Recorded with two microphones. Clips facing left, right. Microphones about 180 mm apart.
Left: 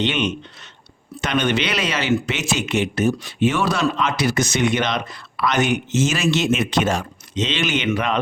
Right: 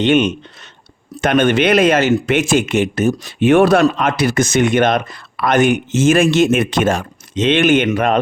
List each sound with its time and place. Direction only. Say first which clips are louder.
0.0 s speech: right 8 dB; 50° right (ahead or behind)